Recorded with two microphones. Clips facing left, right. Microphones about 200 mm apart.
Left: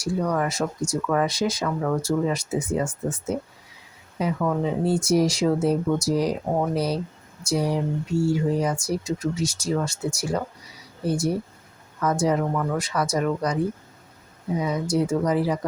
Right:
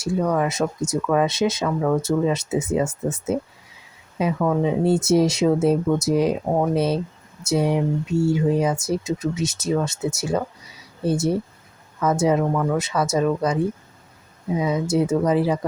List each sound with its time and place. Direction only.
0.0 s speech: 20° right (ahead or behind)